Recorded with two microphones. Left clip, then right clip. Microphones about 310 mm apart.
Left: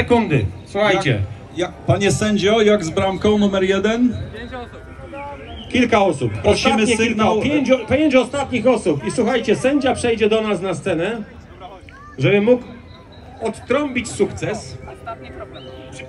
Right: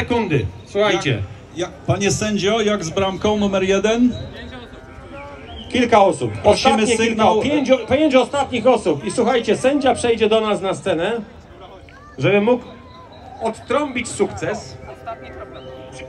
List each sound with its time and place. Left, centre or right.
0.0 s a man's voice: centre; by 4.2 s right
5.6 s a man's voice: centre
12.2 s a man's voice: centre